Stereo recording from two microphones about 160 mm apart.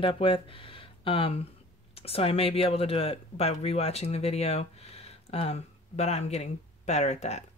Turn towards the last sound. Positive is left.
turn(degrees=45)  # may be behind; listen again after turning